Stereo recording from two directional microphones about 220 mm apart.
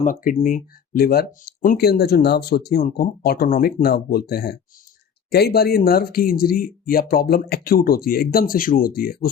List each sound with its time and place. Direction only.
0.0 s speech: 40° left (ahead or behind)